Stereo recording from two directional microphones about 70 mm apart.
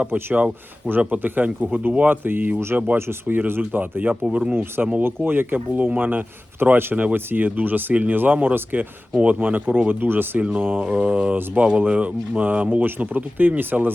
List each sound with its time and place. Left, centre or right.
0.0 s speech: right
4.3 s mantra: centre
4.5 s speech: right
10.4 s mantra: centre
11.3 s speech: centre